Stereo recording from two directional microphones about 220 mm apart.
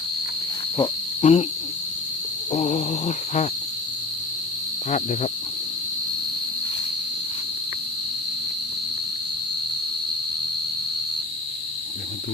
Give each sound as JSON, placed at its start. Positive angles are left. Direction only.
{"t": 0.8, "sound": "cricket", "side_deg": 30}
{"t": 2.5, "sound": "a sound", "side_deg": 30}
{"t": 4.9, "sound": "speech", "side_deg": 35}